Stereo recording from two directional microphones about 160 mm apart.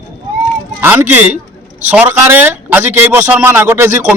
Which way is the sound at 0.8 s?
15° right (ahead or behind).